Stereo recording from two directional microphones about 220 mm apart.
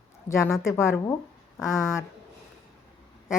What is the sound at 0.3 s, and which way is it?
Speech, 15° left (ahead or behind).